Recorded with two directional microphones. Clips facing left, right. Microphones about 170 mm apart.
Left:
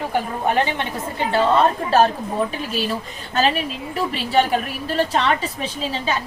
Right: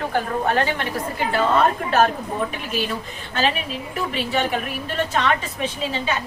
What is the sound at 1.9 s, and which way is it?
Speech, 30° left (ahead or behind).